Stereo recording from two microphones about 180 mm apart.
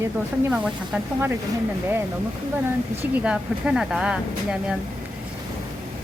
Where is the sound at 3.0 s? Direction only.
5° right (ahead or behind).